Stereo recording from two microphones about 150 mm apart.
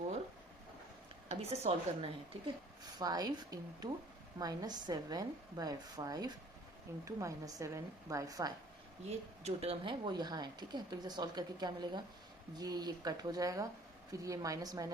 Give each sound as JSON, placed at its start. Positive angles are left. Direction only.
{"t": 1.3, "sound": "a woman's voice", "side_deg": -45}
{"t": 2.8, "sound": "speech", "side_deg": -25}
{"t": 9.0, "sound": "speech", "side_deg": -45}